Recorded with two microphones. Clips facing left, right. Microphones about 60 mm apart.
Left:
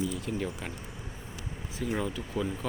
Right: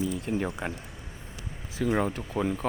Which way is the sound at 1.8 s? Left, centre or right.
Right.